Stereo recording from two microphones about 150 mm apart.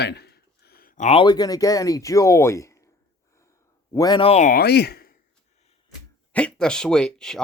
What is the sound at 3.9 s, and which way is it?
Speech, 25° left (ahead or behind).